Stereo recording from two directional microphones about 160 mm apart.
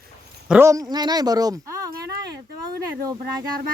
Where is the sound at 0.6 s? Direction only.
20° right (ahead or behind).